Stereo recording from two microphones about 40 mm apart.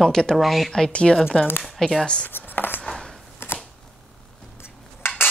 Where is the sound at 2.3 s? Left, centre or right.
Left.